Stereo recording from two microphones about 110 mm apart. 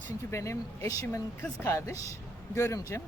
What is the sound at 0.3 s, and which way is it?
Speech, 25° left (ahead or behind).